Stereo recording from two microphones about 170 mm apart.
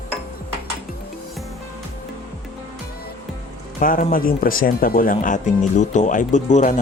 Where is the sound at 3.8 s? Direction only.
55° left (ahead or behind).